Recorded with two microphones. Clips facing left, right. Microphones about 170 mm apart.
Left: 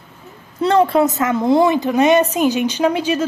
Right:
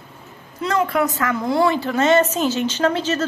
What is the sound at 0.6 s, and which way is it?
A woman's voice, 30° left (ahead or behind).